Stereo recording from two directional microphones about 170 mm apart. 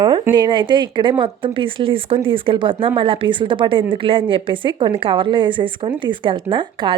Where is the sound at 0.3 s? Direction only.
25° right (ahead or behind).